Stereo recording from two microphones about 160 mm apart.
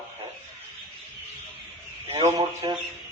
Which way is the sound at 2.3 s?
30° right (ahead or behind).